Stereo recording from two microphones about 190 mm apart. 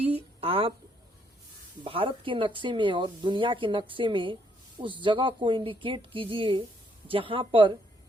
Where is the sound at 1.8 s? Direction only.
30° right (ahead or behind).